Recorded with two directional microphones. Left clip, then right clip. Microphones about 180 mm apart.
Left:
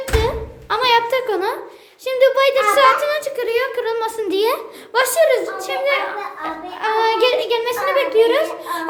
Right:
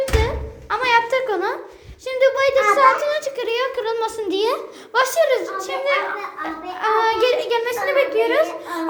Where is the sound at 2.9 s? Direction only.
10° left (ahead or behind).